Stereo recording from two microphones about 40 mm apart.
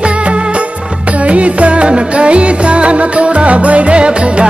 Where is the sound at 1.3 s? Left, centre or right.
Right.